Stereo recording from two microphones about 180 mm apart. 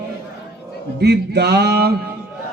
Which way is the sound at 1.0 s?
65° right (ahead or behind).